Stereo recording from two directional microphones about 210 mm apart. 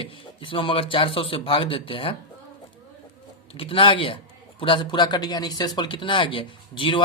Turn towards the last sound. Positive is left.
turn(degrees=25)  # may be behind; listen again after turning